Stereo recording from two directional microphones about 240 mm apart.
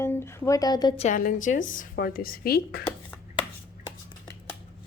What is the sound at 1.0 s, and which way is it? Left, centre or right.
Speech, left.